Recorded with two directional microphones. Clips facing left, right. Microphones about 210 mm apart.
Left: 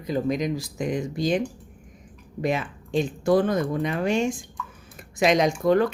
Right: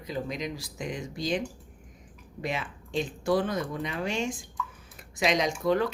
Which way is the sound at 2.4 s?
45° left (ahead or behind).